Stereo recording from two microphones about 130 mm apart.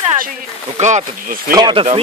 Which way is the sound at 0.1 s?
90° right.